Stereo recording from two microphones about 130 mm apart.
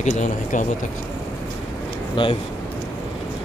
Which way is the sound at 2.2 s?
40° left (ahead or behind).